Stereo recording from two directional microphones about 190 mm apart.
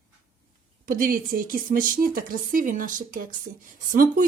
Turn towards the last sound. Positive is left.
turn(degrees=-45)  # may be behind; listen again after turning